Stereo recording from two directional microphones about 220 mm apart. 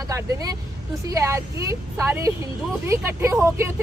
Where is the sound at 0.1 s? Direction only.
15° right (ahead or behind).